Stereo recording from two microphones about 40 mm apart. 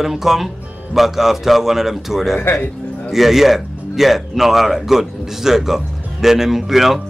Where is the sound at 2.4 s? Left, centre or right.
Left.